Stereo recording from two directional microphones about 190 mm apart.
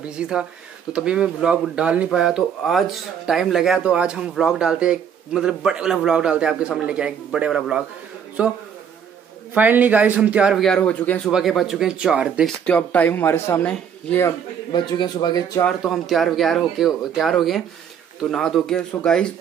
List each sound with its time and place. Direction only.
0.2 s a man's voice: 5° right (ahead or behind)
12.6 s speech: 10° left (ahead or behind)
14.7 s speech: 20° left (ahead or behind)
15.6 s speech: centre (ahead or behind)